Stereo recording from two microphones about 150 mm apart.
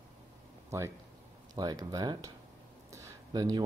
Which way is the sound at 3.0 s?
25° right (ahead or behind).